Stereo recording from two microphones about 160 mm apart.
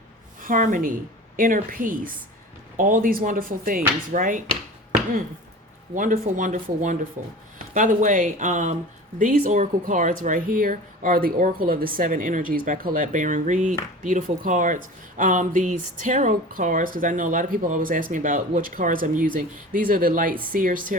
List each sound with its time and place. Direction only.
0.4 s speech: 55° right (ahead or behind)
5.9 s speech: 55° right (ahead or behind)